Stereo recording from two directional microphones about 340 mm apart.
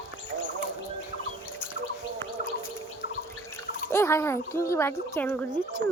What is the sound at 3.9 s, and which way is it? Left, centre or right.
Speech, centre.